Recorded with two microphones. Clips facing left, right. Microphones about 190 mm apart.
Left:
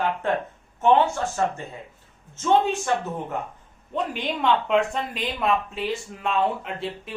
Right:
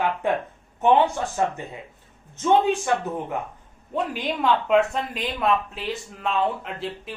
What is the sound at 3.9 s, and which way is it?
Speech, 5° right (ahead or behind).